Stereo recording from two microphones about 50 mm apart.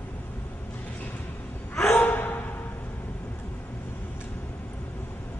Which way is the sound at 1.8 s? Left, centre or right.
Left.